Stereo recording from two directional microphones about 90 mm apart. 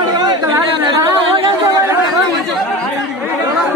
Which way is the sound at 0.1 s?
45° right (ahead or behind).